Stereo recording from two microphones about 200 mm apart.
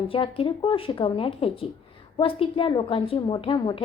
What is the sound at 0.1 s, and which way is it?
A woman's voice, 25° left (ahead or behind).